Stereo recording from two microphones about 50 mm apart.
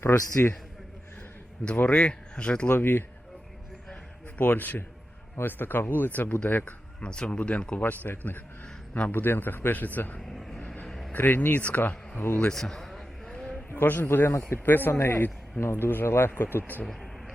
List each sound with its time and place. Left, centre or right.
0.0 s a man's voice: left
1.6 s speech: left
2.7 s speech: left
4.4 s a man's voice: left
7.0 s speech: centre
7.8 s a man's voice: left
10.2 s vehicle: centre
10.8 s a sound: centre
11.1 s a man's voice: left
12.5 s a sound: centre
13.7 s speech: left
15.6 s speech: left
16.8 s a sound: centre